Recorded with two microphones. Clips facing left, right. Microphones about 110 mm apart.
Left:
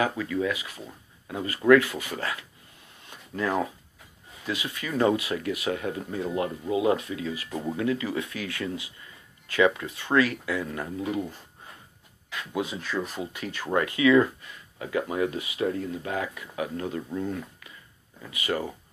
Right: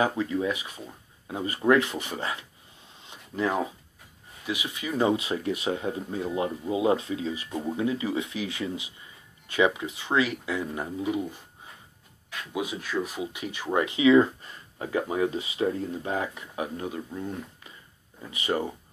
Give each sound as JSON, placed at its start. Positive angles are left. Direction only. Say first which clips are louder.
{"t": 0.0, "sound": "speech", "louder": "right 1 dB", "side_deg": -25}
{"t": 3.0, "sound": "a sound", "louder": "right 2 dB", "side_deg": -20}
{"t": 4.5, "sound": "speech", "louder": "even", "side_deg": -15}
{"t": 12.5, "sound": "speech", "louder": "even", "side_deg": -15}
{"t": 14.4, "sound": "speech", "louder": "right 2 dB", "side_deg": -35}
{"t": 18.3, "sound": "speech", "louder": "right 1 dB", "side_deg": -25}